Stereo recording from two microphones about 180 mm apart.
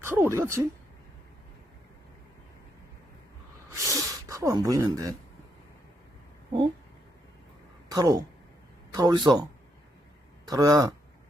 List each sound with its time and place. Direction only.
0.0 s speech: 15° right (ahead or behind)
3.7 s a sound: 15° right (ahead or behind)
7.9 s speech: 20° right (ahead or behind)
10.5 s speech: 20° right (ahead or behind)